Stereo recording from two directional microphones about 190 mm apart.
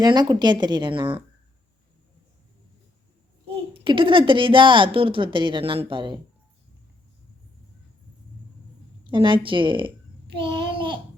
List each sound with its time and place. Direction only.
0.0 s a woman's voice: 20° right (ahead or behind)
3.8 s a woman's voice: 25° right (ahead or behind)
9.0 s a woman's voice: 25° right (ahead or behind)
10.4 s babbling: 25° right (ahead or behind)